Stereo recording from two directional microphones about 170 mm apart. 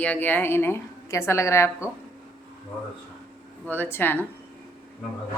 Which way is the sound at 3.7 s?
10° left (ahead or behind).